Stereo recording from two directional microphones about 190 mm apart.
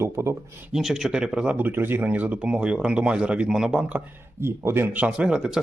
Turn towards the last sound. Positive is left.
turn(degrees=-5)  # may be behind; listen again after turning